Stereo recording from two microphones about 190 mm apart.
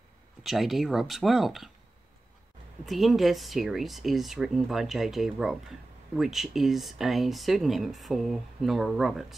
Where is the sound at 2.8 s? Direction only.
Centre (ahead or behind).